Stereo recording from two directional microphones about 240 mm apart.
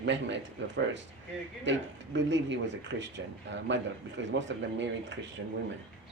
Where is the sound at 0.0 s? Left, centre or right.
Right.